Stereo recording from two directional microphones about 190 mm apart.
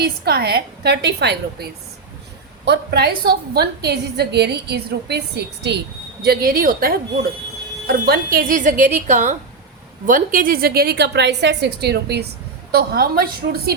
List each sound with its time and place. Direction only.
0.0 s a woman's voice: 55° right (ahead or behind)
2.6 s a woman's voice: 60° right (ahead or behind)